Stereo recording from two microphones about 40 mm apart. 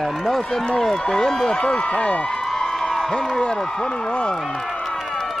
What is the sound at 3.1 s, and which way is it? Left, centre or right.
Speech, centre.